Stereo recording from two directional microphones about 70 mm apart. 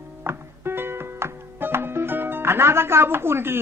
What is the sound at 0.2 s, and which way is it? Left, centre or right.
Music, right.